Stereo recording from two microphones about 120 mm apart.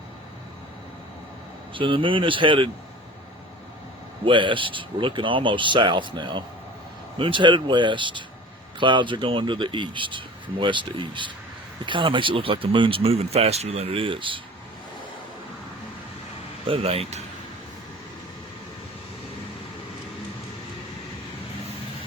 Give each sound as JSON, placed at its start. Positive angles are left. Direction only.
{"t": 1.7, "sound": "speech", "side_deg": -45}
{"t": 4.3, "sound": "speech", "side_deg": -45}
{"t": 16.6, "sound": "speech", "side_deg": -50}